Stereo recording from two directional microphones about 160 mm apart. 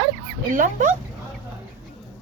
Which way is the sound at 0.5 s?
55° right (ahead or behind).